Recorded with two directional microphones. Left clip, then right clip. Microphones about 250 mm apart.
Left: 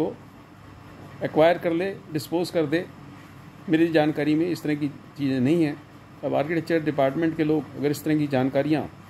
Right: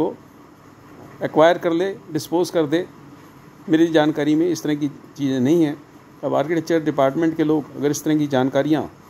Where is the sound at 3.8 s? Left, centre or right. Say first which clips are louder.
Right 4 dB; centre.